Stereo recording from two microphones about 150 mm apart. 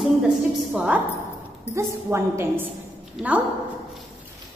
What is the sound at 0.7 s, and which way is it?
A woman's voice, 5° right (ahead or behind).